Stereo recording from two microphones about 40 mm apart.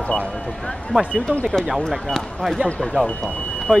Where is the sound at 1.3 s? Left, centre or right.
Left.